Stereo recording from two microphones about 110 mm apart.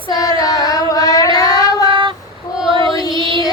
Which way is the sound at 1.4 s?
35° left (ahead or behind).